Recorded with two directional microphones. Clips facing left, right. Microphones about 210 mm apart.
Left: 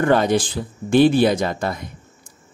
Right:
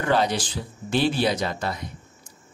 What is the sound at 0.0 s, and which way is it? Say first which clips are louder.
Speech: left 6 dB; 50° left (ahead or behind).